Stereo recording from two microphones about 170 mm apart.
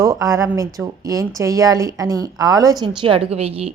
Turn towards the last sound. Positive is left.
turn(degrees=-35)  # may be behind; listen again after turning